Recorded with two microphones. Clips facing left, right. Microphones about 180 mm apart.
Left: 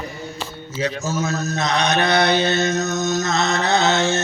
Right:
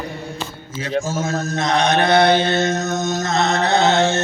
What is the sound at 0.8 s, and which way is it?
Mantra, 50° right (ahead or behind).